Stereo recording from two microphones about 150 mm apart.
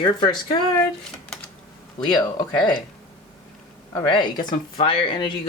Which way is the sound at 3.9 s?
30° left (ahead or behind).